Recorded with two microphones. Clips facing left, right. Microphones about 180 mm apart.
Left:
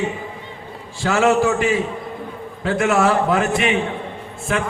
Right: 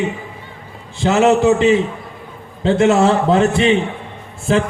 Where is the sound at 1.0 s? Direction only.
20° right (ahead or behind).